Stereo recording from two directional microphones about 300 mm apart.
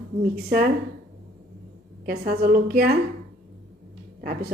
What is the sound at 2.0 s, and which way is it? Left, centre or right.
Speech, right.